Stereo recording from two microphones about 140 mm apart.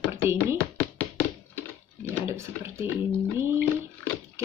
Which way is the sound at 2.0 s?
20° right (ahead or behind).